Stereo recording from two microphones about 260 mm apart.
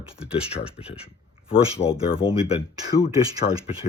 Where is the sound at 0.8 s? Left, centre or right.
Left.